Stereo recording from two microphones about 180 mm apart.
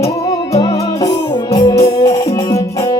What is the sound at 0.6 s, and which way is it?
Music, 20° left (ahead or behind).